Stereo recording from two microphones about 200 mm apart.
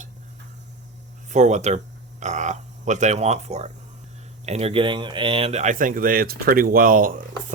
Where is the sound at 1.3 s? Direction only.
35° right (ahead or behind).